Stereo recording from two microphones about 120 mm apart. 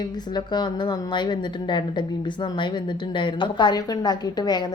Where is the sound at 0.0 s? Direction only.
35° left (ahead or behind).